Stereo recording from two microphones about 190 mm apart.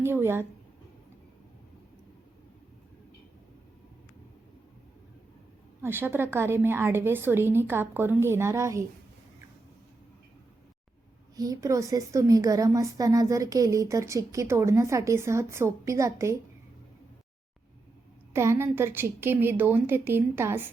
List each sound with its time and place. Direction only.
0.0 s a woman's voice: 10° right (ahead or behind)
5.8 s a woman's voice: 10° right (ahead or behind)
11.3 s a woman's voice: 20° right (ahead or behind)
18.3 s a woman's voice: 15° right (ahead or behind)